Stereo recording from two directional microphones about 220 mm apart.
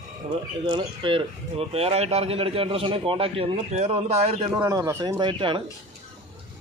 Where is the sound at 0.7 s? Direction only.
25° right (ahead or behind).